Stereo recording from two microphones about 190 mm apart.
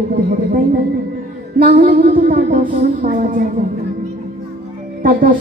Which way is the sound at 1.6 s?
45° right (ahead or behind).